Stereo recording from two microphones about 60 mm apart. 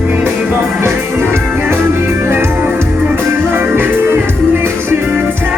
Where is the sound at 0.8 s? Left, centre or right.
Right.